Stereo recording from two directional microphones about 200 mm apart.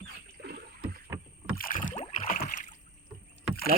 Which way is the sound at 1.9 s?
30° left (ahead or behind).